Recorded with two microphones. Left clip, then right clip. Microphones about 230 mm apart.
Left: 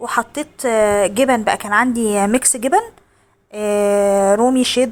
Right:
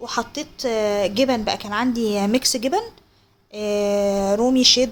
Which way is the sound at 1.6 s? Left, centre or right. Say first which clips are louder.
Left 8 dB; centre.